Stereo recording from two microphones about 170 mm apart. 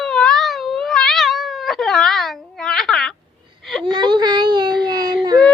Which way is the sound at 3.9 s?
25° right (ahead or behind).